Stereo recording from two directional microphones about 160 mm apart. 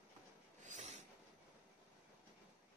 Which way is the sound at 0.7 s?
45° right (ahead or behind).